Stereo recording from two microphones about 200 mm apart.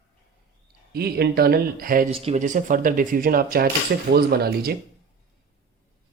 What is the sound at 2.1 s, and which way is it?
Speech, 30° right (ahead or behind).